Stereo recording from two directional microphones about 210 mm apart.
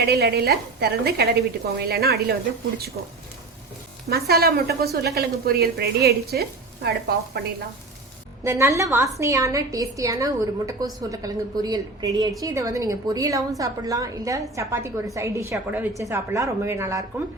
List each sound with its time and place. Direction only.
0.0 s a woman's voice: 50° right (ahead or behind)
4.1 s a woman's voice: 50° right (ahead or behind)
8.4 s a woman's voice: 15° right (ahead or behind)